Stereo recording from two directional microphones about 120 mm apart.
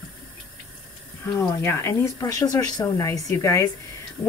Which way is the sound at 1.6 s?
20° left (ahead or behind).